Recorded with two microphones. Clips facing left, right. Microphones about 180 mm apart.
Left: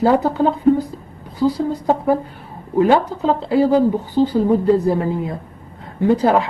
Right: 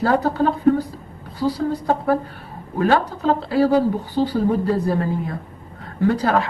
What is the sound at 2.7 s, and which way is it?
A woman's voice, 20° left (ahead or behind).